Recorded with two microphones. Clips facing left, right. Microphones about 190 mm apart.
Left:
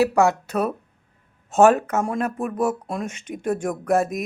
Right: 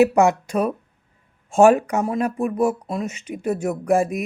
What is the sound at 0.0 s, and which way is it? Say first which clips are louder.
Speech: right 3 dB; 20° right (ahead or behind).